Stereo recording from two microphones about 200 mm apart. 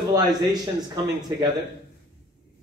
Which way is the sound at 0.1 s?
20° right (ahead or behind).